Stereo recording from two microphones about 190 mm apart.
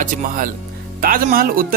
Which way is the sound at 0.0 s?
45° right (ahead or behind).